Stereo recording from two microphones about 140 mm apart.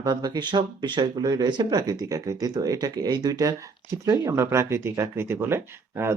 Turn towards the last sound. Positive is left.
turn(degrees=-20)  # may be behind; listen again after turning